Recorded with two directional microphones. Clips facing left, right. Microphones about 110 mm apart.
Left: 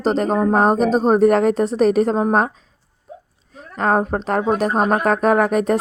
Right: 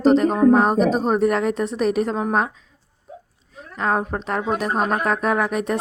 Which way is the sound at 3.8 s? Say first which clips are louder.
Left 4 dB; 40° left (ahead or behind).